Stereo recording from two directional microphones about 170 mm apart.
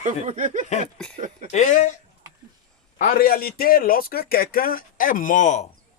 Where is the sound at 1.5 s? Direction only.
45° left (ahead or behind).